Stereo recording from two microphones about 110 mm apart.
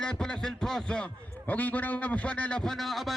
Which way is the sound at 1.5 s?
15° left (ahead or behind).